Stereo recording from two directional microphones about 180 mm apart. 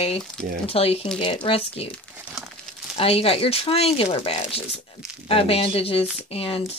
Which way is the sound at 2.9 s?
35° left (ahead or behind).